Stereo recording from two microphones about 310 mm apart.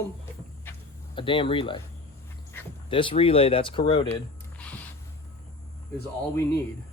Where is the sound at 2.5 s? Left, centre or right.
Centre.